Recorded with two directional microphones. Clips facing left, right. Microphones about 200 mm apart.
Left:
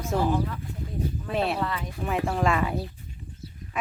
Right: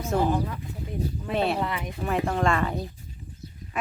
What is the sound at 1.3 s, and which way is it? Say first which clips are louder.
Speech: right 2 dB; centre (ahead or behind).